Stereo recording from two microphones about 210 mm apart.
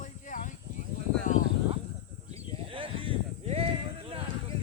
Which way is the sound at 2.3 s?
25° right (ahead or behind).